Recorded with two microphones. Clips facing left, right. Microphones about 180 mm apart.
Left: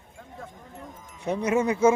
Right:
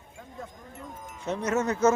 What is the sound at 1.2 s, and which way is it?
Speech, 10° left (ahead or behind).